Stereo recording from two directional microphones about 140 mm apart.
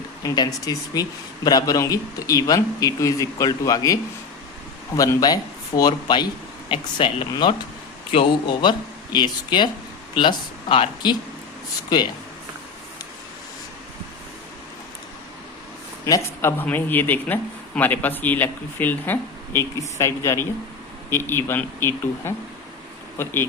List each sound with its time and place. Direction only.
0.2 s a man's voice: 25° left (ahead or behind)
4.9 s a man's voice: 25° left (ahead or behind)
16.0 s a man's voice: 20° left (ahead or behind)